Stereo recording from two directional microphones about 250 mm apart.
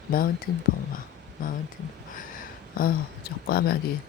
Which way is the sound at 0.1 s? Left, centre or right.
Left.